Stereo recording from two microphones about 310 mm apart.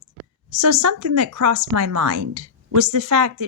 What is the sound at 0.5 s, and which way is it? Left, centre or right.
Speech, right.